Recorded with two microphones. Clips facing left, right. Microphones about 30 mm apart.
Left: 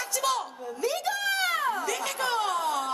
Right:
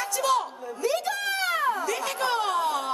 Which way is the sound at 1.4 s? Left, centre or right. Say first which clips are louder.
Right 2 dB; centre.